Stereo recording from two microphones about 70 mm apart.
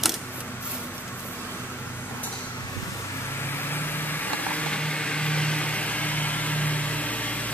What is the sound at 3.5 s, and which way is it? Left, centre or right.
Vehicle, left.